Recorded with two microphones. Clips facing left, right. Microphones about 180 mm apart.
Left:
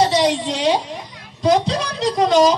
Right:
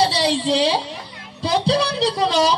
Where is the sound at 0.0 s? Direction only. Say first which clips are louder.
Left 2 dB; 30° right (ahead or behind).